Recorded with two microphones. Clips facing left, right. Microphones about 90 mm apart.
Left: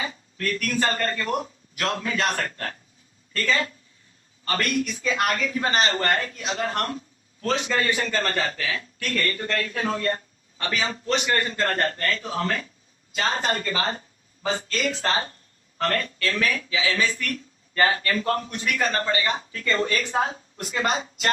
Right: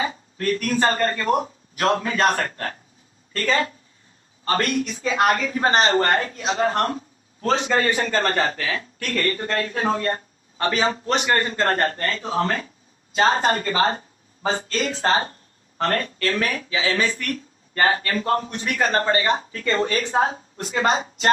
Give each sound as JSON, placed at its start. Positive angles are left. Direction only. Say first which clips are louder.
{"t": 0.0, "sound": "a man's voice", "louder": "right 5 dB", "side_deg": -35}
{"t": 17.7, "sound": "a man's voice", "louder": "right 1 dB", "side_deg": -35}